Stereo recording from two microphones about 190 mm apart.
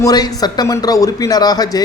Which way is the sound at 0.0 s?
20° left (ahead or behind).